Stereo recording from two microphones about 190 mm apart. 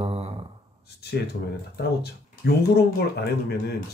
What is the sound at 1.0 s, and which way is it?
Speech, 60° left (ahead or behind).